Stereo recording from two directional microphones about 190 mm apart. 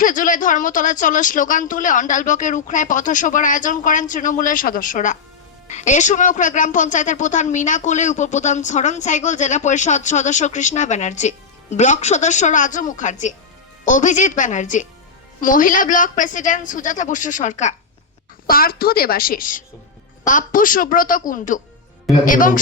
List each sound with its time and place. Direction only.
0.0 s speech: 45° left (ahead or behind)
18.4 s speech: 50° left (ahead or behind)